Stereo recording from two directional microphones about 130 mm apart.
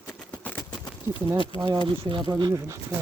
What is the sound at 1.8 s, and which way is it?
Speech, 45° right (ahead or behind).